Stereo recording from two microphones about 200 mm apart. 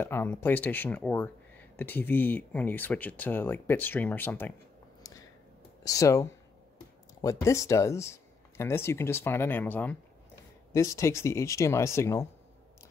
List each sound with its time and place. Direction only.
0.0 s speech: 10° left (ahead or behind)
5.1 s a sound: 15° left (ahead or behind)
5.9 s speech: 15° left (ahead or behind)